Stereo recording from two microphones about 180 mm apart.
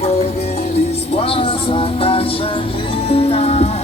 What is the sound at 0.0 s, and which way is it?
Music, 35° left (ahead or behind).